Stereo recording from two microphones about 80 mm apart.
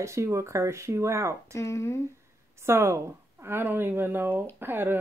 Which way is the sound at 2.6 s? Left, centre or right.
Right.